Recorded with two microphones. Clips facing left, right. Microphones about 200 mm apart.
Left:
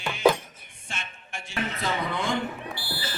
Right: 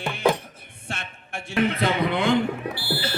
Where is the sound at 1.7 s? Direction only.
60° right (ahead or behind).